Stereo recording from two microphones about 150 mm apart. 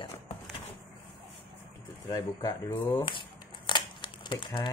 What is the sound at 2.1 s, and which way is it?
Speech, 25° left (ahead or behind).